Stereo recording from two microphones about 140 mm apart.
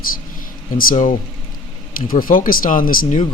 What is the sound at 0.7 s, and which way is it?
Speech, 75° left (ahead or behind).